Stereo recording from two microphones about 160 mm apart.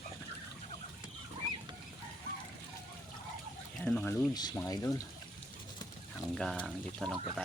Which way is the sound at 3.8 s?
10° left (ahead or behind).